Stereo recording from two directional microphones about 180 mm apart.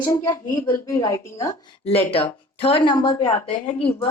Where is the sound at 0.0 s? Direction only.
20° left (ahead or behind).